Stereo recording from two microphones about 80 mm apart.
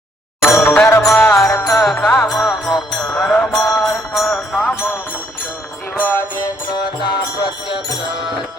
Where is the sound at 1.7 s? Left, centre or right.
Centre.